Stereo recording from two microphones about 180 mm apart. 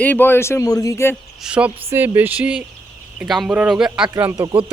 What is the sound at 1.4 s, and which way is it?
Speech, 5° right (ahead or behind).